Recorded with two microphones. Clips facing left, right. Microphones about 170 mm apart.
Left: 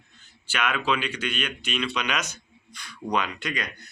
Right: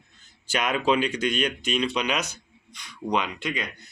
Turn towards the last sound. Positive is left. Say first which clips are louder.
# right 1 dB
turn(degrees=-25)  # may be behind; listen again after turning